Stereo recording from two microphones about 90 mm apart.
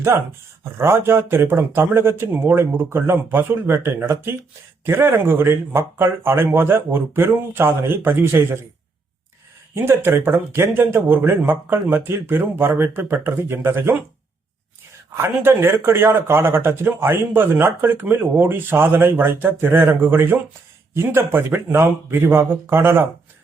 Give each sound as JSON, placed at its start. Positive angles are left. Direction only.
{"t": 0.1, "sound": "speech", "side_deg": -35}
{"t": 9.7, "sound": "speech", "side_deg": -25}
{"t": 15.1, "sound": "speech", "side_deg": -30}